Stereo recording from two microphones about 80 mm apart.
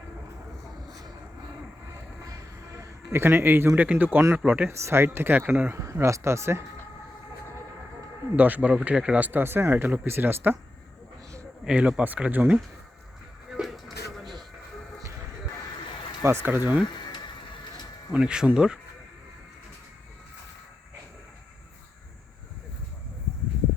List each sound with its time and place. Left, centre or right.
2.2 s train: right
3.1 s speech: right
4.7 s speech: right
5.7 s speech: right
8.4 s speech: right
11.6 s speech: centre
13.5 s a sound: centre
16.2 s speech: right
16.8 s a sound: left
18.1 s speech: centre